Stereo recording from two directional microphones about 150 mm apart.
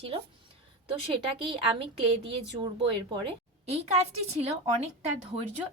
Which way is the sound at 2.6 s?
35° right (ahead or behind).